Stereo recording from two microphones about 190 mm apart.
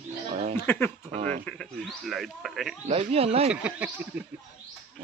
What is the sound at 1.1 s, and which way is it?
Speech, 35° right (ahead or behind).